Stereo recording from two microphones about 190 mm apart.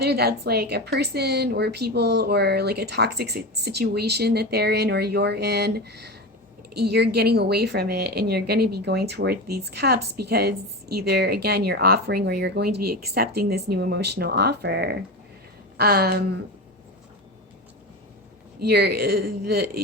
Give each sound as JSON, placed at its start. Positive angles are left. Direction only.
{"t": 0.0, "sound": "a woman's voice", "side_deg": -55}
{"t": 18.6, "sound": "a woman's voice", "side_deg": -60}